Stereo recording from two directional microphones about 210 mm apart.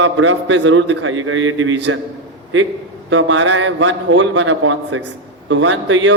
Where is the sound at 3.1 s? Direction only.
65° right (ahead or behind).